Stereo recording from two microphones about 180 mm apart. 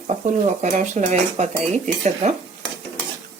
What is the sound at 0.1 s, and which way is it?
Dishes, 40° right (ahead or behind).